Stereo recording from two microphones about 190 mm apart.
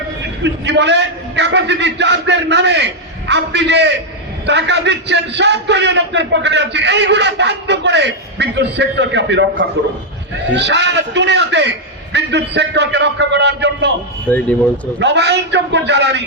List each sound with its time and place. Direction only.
0.4 s a man's voice: 65° right (ahead or behind)
14.3 s speech: 10° left (ahead or behind)
14.9 s a man's voice: 65° right (ahead or behind)